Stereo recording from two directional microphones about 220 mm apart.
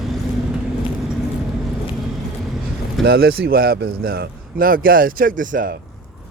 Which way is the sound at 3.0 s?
45° right (ahead or behind).